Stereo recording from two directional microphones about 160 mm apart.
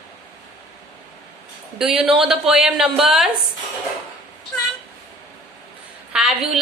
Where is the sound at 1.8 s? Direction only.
5° right (ahead or behind).